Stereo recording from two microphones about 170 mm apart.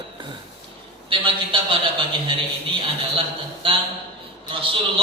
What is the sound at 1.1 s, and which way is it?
A man's voice, 30° right (ahead or behind).